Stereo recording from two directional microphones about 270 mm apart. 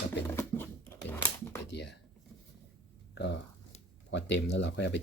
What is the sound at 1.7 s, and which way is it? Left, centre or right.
Pigeon, left.